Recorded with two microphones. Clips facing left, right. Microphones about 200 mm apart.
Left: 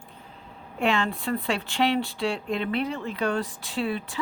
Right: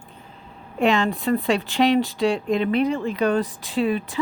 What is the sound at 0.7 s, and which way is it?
A woman's voice, 20° right (ahead or behind).